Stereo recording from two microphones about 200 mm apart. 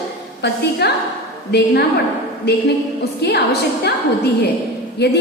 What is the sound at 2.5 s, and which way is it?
Speech, 55° left (ahead or behind).